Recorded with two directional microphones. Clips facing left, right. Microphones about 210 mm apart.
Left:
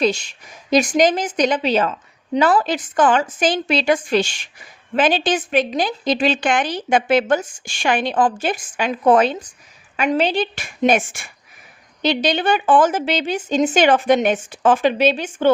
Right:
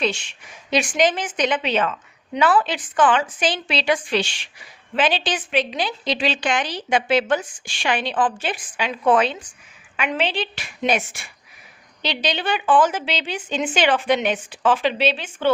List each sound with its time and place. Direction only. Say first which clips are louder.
0.0 s a woman's voice: left 5 dB; 40° left (ahead or behind)